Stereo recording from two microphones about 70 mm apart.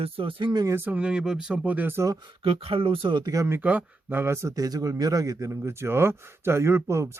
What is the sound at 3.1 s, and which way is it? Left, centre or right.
Speech, right.